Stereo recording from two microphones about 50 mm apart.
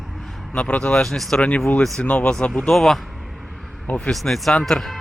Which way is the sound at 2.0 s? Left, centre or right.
Left.